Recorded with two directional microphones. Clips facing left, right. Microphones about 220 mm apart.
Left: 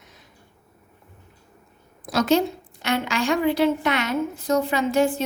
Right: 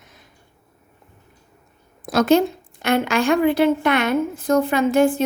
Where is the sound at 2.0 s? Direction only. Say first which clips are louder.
Right 4 dB; 50° right (ahead or behind).